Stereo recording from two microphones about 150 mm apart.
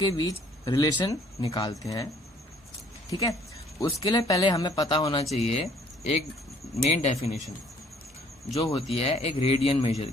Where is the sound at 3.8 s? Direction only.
35° left (ahead or behind).